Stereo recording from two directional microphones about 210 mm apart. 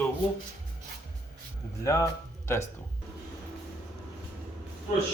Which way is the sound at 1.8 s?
15° left (ahead or behind).